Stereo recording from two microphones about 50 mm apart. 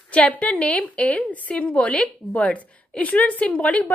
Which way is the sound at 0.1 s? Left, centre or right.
Left.